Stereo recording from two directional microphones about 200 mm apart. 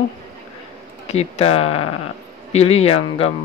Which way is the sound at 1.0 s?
30° left (ahead or behind).